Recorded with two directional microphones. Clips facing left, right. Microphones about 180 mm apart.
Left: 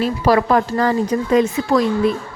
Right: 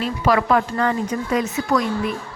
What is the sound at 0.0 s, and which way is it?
Speech, 35° left (ahead or behind).